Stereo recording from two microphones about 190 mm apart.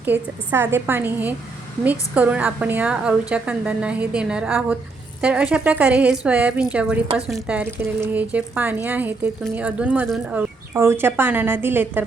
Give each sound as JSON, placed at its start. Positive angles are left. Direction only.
{"t": 0.0, "sound": "a woman's voice", "side_deg": -10}